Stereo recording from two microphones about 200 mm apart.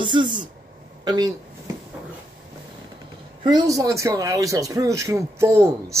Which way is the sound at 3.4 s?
20° right (ahead or behind).